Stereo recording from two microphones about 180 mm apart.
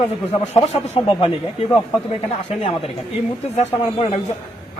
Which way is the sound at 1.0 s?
30° left (ahead or behind).